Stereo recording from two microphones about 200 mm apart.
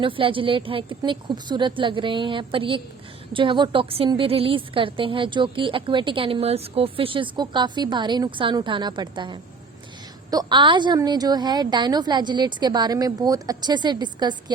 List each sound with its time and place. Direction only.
0.0 s a woman's voice: 25° right (ahead or behind)